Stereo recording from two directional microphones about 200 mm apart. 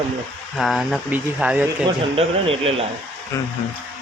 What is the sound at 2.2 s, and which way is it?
Speech, 30° right (ahead or behind).